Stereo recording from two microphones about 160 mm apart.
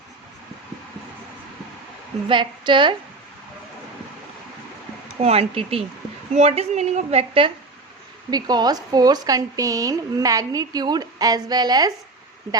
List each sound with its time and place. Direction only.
2.2 s a woman's voice: 30° right (ahead or behind)
5.2 s a woman's voice: 40° right (ahead or behind)
8.3 s a woman's voice: 25° right (ahead or behind)